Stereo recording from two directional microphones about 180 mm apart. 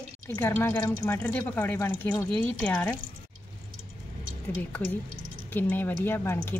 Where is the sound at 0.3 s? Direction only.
10° left (ahead or behind).